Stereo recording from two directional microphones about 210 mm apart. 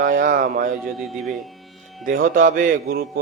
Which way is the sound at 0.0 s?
40° right (ahead or behind).